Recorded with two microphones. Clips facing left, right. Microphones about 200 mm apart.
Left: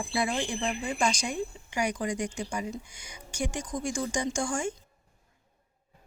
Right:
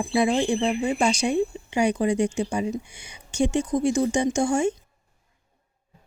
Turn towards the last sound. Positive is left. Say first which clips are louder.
# right 8 dB
turn(degrees=-25)  # may be behind; listen again after turning